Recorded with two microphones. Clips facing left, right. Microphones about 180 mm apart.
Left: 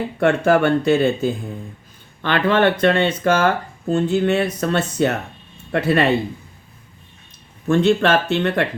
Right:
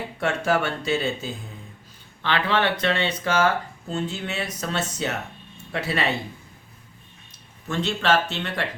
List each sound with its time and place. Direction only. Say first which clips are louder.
0.2 s speech: left 8 dB; 55° left (ahead or behind)
7.7 s speech: left 8 dB; 55° left (ahead or behind)